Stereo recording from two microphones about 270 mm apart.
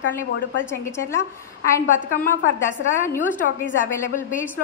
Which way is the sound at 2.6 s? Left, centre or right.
Centre.